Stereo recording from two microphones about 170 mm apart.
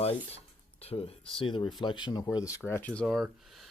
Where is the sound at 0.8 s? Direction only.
35° left (ahead or behind).